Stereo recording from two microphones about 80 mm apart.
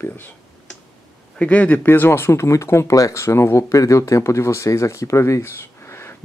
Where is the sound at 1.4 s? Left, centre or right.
Centre.